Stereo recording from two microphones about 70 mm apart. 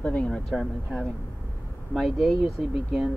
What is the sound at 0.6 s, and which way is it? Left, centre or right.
Speech, centre.